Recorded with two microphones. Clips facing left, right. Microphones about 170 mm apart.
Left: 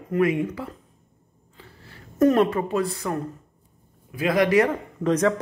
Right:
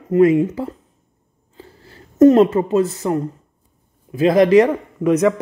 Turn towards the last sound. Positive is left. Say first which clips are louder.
# right 6 dB
turn(degrees=-15)  # may be behind; listen again after turning